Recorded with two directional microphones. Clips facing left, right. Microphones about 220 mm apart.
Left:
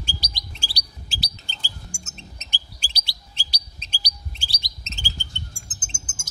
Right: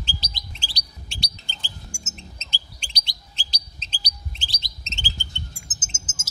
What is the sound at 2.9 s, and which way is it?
Bird, 10° left (ahead or behind).